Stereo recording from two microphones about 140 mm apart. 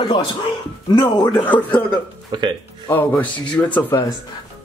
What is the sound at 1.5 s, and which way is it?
Speech, 10° left (ahead or behind).